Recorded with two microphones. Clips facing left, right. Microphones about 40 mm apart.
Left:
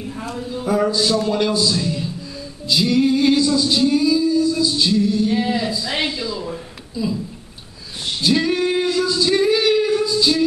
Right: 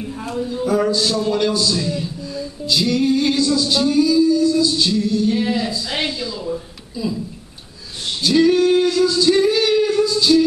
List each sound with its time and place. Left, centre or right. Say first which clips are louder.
0.4 s speech: right 8 dB; centre
0.7 s a man's voice: left 1 dB; centre
1.5 s speech: even; left
1.8 s speech: even; centre
2.7 s a man's voice: left 1 dB; centre
5.4 s a man's voice: even; centre
8.4 s singing: right 5 dB; centre
9.3 s female singing: left 2 dB; centre